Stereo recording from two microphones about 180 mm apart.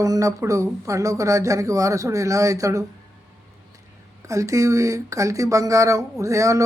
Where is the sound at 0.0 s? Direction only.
20° right (ahead or behind).